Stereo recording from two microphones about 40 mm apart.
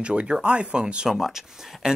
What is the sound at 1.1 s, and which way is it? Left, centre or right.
Speech, centre.